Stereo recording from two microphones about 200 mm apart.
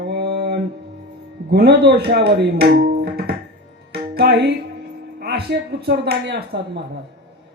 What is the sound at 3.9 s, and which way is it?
Music, 55° right (ahead or behind).